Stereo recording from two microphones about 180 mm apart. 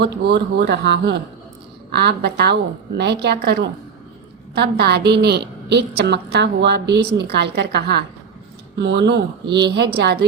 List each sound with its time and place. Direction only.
0.0 s a woman's voice: 65° right (ahead or behind)